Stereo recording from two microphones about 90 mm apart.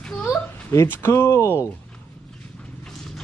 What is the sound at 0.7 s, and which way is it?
Speech, 30° left (ahead or behind).